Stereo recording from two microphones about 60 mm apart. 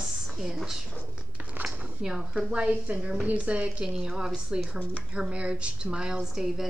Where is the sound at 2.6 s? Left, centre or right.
Right.